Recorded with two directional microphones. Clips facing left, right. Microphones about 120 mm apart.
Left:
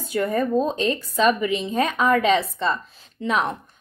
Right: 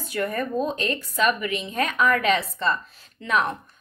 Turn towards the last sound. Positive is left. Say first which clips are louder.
# left 1 dB
turn(degrees=25)  # may be behind; listen again after turning